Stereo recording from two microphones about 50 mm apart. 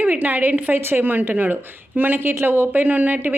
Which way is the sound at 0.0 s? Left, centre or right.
Right.